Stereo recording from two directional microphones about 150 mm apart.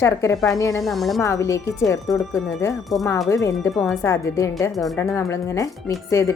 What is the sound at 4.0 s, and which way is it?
Speech, 20° left (ahead or behind).